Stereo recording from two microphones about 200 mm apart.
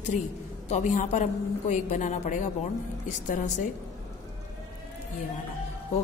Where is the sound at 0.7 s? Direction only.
35° left (ahead or behind).